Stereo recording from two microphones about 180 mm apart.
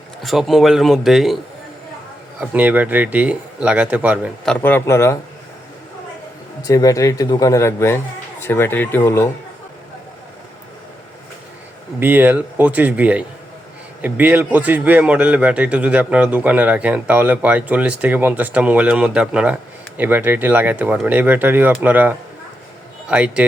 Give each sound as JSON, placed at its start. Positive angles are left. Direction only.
{"t": 0.2, "sound": "speech", "side_deg": 0}
{"t": 2.4, "sound": "a man's voice", "side_deg": -10}
{"t": 4.4, "sound": "a man's voice", "side_deg": 10}
{"t": 6.7, "sound": "a man's voice", "side_deg": 20}
{"t": 11.9, "sound": "a man's voice", "side_deg": -10}